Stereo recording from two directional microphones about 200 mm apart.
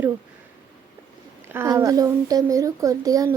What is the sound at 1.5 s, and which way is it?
A child's voice, 10° right (ahead or behind).